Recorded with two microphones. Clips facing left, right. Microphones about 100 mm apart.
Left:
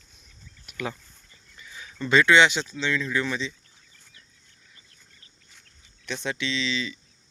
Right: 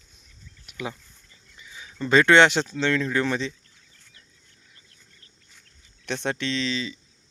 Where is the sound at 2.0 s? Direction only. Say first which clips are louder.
Right 2 dB; 40° right (ahead or behind).